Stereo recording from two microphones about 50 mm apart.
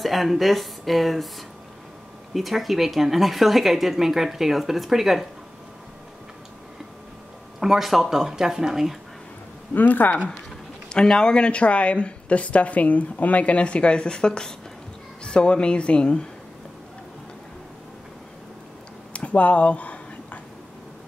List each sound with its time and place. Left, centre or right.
0.0 s speech: centre
2.3 s speech: centre
7.6 s speech: centre
9.8 s speech: left
10.9 s speech: centre
19.1 s a sound: left